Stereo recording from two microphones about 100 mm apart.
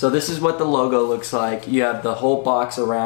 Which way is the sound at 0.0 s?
15° left (ahead or behind).